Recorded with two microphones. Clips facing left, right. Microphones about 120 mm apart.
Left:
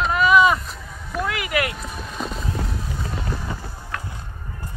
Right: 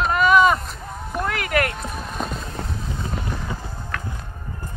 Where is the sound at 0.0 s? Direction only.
Centre (ahead or behind).